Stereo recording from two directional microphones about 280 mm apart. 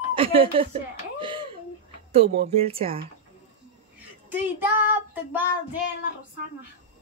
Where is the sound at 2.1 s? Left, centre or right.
Right.